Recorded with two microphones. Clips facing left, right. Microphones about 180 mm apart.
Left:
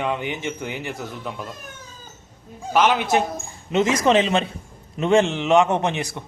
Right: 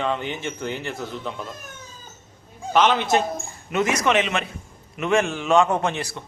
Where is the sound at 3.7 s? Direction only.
25° left (ahead or behind).